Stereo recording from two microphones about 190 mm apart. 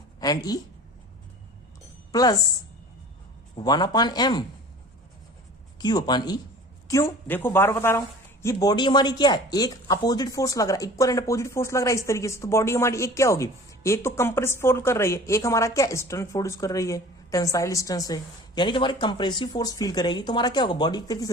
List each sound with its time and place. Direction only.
0.2 s a woman's voice: 20° left (ahead or behind)
2.1 s speech: 20° left (ahead or behind)
3.5 s speech: 20° left (ahead or behind)
5.8 s speech: 20° left (ahead or behind)